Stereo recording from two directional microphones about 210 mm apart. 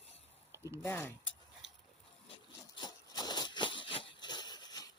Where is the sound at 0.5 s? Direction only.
10° right (ahead or behind).